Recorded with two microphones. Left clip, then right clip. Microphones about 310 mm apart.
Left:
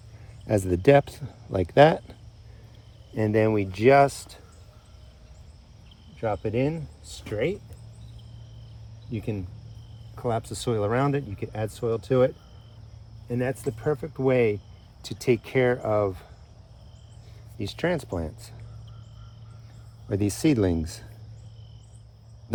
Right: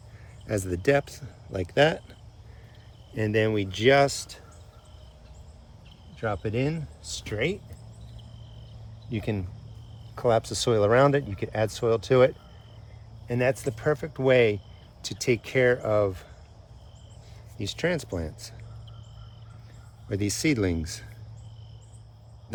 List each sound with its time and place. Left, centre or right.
0.4 s speech: centre
3.2 s speech: centre
6.1 s speech: centre
9.1 s speech: centre
17.6 s speech: centre
20.1 s speech: centre